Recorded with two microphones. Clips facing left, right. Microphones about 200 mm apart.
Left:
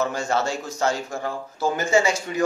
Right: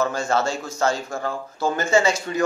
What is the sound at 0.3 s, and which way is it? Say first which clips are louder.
A man's voice: right 1 dB; 15° left (ahead or behind).